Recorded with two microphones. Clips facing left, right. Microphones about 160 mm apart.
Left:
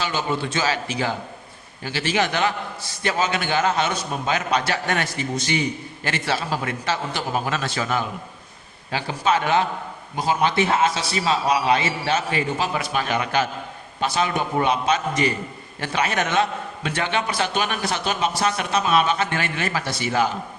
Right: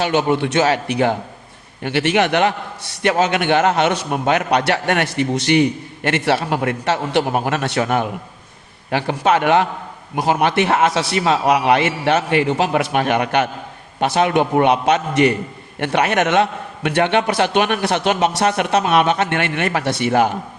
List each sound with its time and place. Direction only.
0.0 s a man's voice: 65° right (ahead or behind)